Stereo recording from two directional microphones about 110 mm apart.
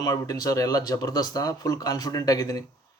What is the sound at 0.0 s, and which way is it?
Speech, 35° left (ahead or behind).